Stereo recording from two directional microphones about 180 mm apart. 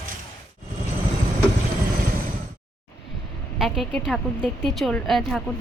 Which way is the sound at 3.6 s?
Centre (ahead or behind).